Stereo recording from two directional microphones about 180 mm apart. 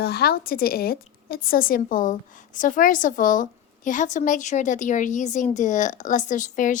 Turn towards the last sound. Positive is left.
turn(degrees=45)  # may be behind; listen again after turning